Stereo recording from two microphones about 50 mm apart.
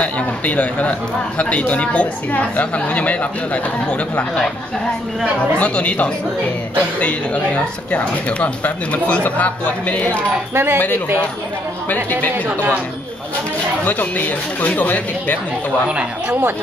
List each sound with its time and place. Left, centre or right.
0.0 s speech: left
5.6 s speech: left
10.5 s speech: right
11.9 s speech: left
13.8 s speech: left
15.9 s speech: right